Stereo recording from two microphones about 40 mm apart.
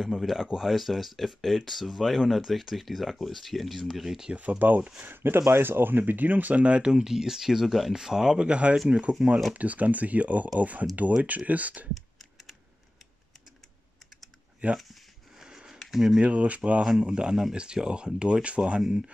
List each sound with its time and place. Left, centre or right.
0.0 s speech: centre
4.0 s speech: centre
4.4 s speech: right
5.0 s speech: right
6.9 s speech: centre
9.6 s speech: right
14.6 s speech: right
15.3 s a sound: centre
15.9 s speech: centre
16.2 s speech: right
17.0 s speech: right